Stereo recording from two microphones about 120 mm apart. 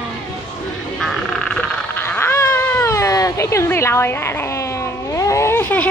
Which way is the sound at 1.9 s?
15° left (ahead or behind).